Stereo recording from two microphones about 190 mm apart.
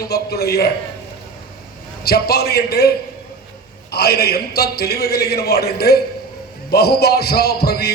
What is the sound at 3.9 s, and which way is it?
A man's voice, 55° left (ahead or behind).